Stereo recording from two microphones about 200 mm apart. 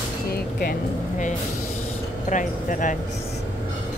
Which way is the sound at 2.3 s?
40° left (ahead or behind).